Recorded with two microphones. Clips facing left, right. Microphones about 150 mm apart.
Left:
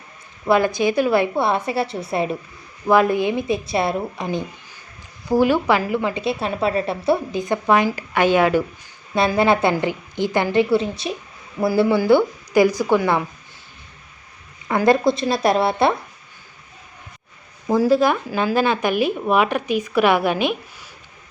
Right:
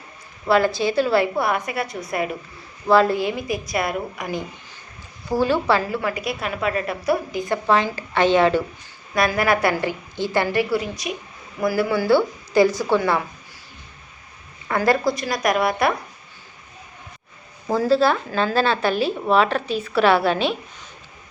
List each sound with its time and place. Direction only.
0.4 s a woman's voice: 20° left (ahead or behind)
2.8 s a woman's voice: 15° left (ahead or behind)
9.1 s a woman's voice: 25° left (ahead or behind)
14.7 s a woman's voice: 20° left (ahead or behind)
17.7 s a woman's voice: 15° left (ahead or behind)